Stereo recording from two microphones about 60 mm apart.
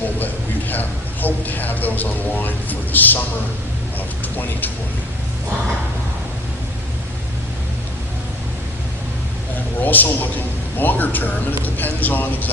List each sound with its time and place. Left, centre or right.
0.7 s a man's voice: left
9.8 s a man's voice: left